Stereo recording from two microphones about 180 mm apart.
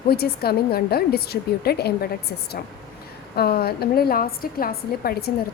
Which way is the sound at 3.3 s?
60° left (ahead or behind).